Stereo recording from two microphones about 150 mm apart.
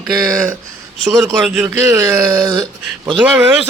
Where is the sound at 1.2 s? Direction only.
5° right (ahead or behind).